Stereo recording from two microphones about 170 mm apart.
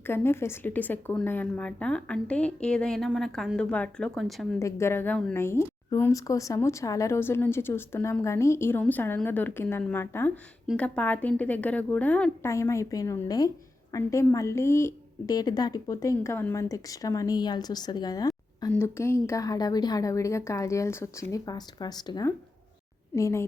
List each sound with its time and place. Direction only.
0.0 s speech: 15° left (ahead or behind)
4.6 s a woman's voice: 15° left (ahead or behind)